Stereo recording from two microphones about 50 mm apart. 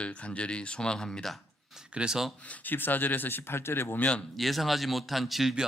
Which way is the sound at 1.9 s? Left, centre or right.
Centre.